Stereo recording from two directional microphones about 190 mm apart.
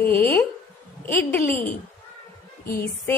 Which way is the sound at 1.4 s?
45° left (ahead or behind).